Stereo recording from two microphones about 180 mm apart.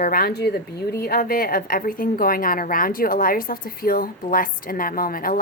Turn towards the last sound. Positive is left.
turn(degrees=55)  # may be behind; listen again after turning